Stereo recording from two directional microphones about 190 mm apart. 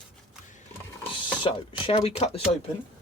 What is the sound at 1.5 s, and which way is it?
Speech, 30° left (ahead or behind).